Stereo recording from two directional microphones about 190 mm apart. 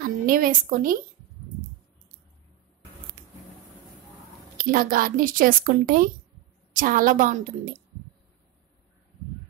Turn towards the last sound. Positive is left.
turn(degrees=-45)  # may be behind; listen again after turning